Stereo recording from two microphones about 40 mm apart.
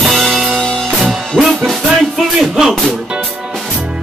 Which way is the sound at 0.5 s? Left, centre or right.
Centre.